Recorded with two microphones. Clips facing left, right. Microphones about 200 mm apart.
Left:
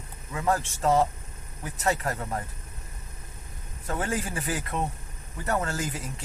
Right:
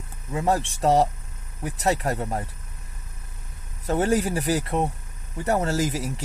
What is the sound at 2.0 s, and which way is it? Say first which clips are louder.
Speech: right 4 dB; 35° right (ahead or behind).